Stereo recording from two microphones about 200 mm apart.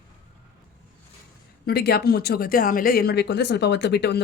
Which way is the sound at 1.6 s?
50° left (ahead or behind).